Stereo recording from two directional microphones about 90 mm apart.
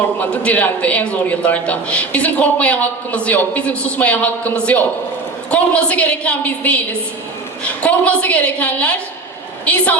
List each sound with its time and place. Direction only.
0.2 s a man's voice: 20° left (ahead or behind)